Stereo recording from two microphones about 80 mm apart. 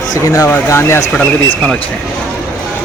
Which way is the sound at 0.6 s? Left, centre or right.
Left.